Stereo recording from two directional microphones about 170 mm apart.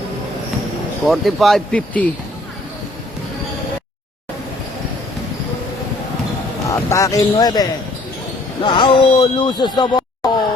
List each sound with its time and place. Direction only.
1.0 s speech: centre (ahead or behind)
6.7 s speech: 20° left (ahead or behind)